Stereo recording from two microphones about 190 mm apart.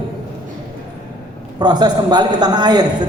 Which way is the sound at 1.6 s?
20° right (ahead or behind).